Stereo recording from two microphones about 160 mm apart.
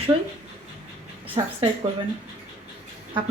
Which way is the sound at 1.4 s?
30° right (ahead or behind).